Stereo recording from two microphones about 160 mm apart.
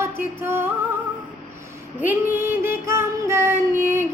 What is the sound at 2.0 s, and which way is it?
Child singing, 10° right (ahead or behind).